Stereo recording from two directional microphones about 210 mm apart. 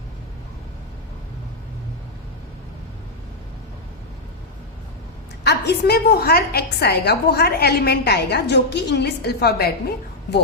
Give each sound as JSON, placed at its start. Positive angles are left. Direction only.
{"t": 5.5, "sound": "a woman's voice", "side_deg": 50}